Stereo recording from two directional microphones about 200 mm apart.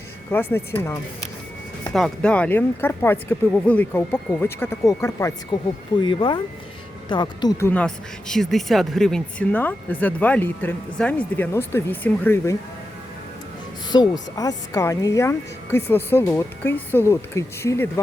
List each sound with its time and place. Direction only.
0.3 s speech: 10° left (ahead or behind)
7.7 s speech: 5° left (ahead or behind)
13.9 s speech: 20° left (ahead or behind)